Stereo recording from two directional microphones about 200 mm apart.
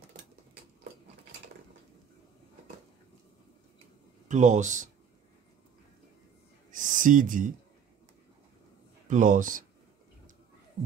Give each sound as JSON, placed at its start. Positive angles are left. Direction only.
{"t": 4.3, "sound": "speech", "side_deg": -35}
{"t": 6.7, "sound": "a sound", "side_deg": -40}
{"t": 9.0, "sound": "speech", "side_deg": -40}